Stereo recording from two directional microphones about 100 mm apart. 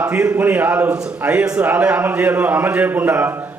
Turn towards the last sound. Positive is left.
turn(degrees=-20)  # may be behind; listen again after turning